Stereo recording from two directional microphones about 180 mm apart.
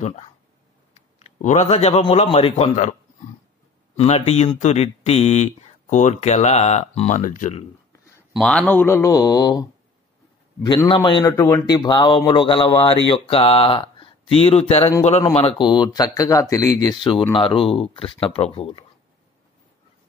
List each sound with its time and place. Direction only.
0.0 s speech: 35° left (ahead or behind)
8.4 s speech: 5° left (ahead or behind)
11.7 s speech: 25° left (ahead or behind)